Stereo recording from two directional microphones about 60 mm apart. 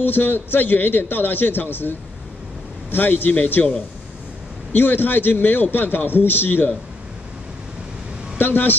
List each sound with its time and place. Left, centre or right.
0.0 s a man's voice: left
4.7 s a man's voice: left
8.4 s a man's voice: left